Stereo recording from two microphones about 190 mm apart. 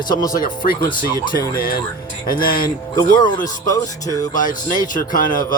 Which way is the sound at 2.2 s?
50° left (ahead or behind).